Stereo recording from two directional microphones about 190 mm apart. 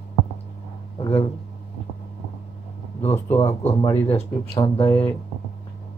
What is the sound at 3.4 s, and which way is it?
Speech, 35° left (ahead or behind).